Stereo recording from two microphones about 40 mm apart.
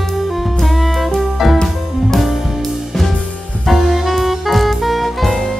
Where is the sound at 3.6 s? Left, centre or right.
Centre.